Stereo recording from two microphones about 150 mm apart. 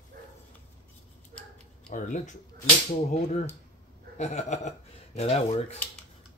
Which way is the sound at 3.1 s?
45° left (ahead or behind).